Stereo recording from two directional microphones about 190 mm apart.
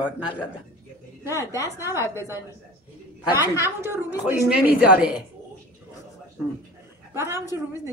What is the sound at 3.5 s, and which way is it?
A woman's voice, 15° right (ahead or behind).